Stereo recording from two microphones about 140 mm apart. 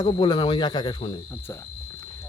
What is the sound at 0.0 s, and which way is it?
Speech, 35° left (ahead or behind).